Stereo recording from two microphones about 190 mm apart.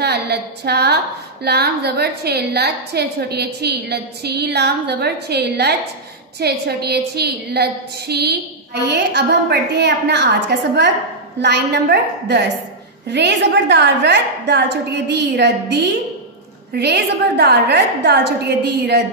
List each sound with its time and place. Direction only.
0.0 s a woman's voice: 60° right (ahead or behind)
11.4 s a woman's voice: 65° right (ahead or behind)